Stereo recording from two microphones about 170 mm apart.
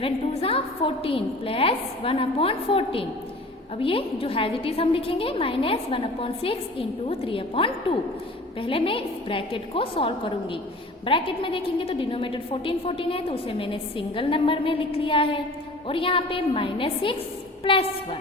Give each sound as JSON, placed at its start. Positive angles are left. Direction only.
{"t": 0.0, "sound": "a woman's voice", "side_deg": 35}